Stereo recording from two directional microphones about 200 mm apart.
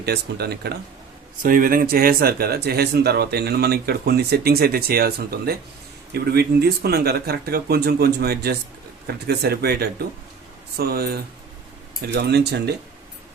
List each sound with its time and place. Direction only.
0.0 s speech: 55° right (ahead or behind)
1.4 s speech: 45° right (ahead or behind)